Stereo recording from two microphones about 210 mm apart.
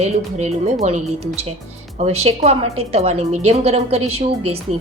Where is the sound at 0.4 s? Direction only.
30° right (ahead or behind).